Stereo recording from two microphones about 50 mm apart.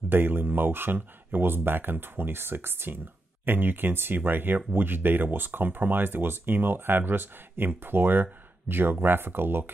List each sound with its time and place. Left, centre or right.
0.1 s speech: right